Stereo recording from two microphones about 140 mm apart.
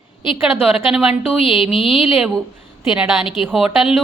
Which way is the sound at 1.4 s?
40° left (ahead or behind).